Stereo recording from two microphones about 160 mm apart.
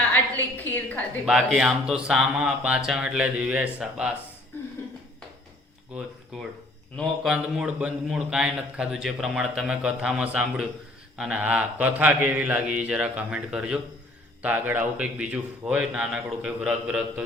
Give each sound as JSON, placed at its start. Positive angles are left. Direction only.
{"t": 0.5, "sound": "a woman's voice", "side_deg": 10}
{"t": 1.2, "sound": "a man's voice", "side_deg": 0}
{"t": 5.9, "sound": "a sound", "side_deg": -5}
{"t": 6.9, "sound": "a man's voice", "side_deg": 0}